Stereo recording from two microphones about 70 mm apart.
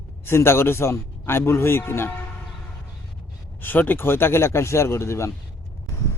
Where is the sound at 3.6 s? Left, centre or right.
Left.